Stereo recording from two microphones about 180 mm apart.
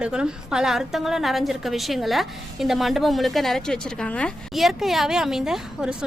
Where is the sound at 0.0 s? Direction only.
5° right (ahead or behind).